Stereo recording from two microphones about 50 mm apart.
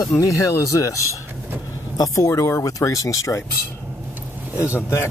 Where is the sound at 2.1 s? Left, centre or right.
Left.